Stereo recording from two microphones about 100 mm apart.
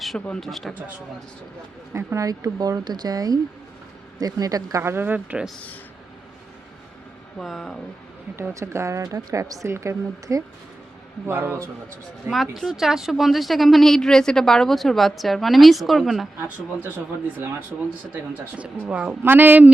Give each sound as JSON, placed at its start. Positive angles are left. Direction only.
{"t": 0.0, "sound": "speech", "side_deg": 0}
{"t": 1.9, "sound": "speech", "side_deg": -25}
{"t": 4.8, "sound": "speech", "side_deg": -20}
{"t": 7.3, "sound": "speech", "side_deg": 0}
{"t": 8.4, "sound": "a woman's voice", "side_deg": -25}
{"t": 12.3, "sound": "speech", "side_deg": 0}
{"t": 18.1, "sound": "speech", "side_deg": -15}